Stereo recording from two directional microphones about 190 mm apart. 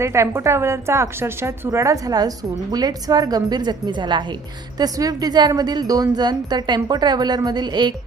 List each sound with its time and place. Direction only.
0.0 s speech: 15° right (ahead or behind)